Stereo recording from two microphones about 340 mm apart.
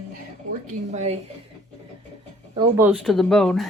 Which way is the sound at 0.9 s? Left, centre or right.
Centre.